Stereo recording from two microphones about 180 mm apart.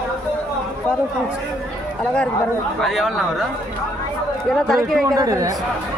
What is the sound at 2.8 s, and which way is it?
Speech, centre (ahead or behind).